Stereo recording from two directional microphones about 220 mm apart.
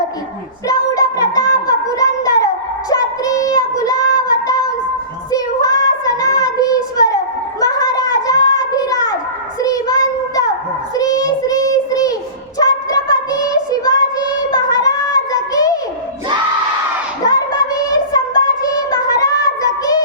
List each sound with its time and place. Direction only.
0.7 s child singing: 15° left (ahead or behind)
7.8 s gargling: 15° left (ahead or behind)
9.6 s child singing: 15° left (ahead or behind)
17.2 s child singing: 15° left (ahead or behind)